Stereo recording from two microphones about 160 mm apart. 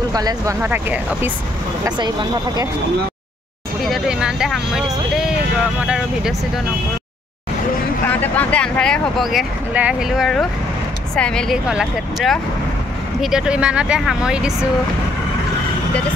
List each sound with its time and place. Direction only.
0.1 s speech: 25° right (ahead or behind)
0.6 s speech: 10° right (ahead or behind)
1.9 s speech: 25° right (ahead or behind)
3.8 s speech: centre (ahead or behind)
8.1 s speech: 10° left (ahead or behind); by 14.7 s 5° right (ahead or behind)